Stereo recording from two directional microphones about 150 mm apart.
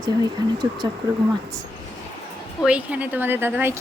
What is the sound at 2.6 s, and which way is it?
Speech, 5° right (ahead or behind).